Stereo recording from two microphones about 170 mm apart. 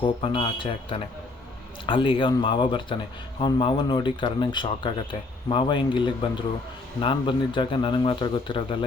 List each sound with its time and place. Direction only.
0.0 s a man's voice: 30° left (ahead or behind)